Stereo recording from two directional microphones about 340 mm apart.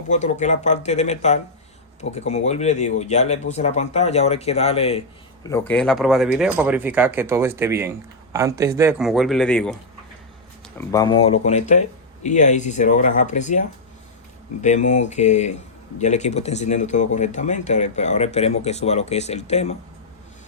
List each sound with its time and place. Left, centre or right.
0.1 s speech: left; by 9.7 s centre
10.8 s speech: centre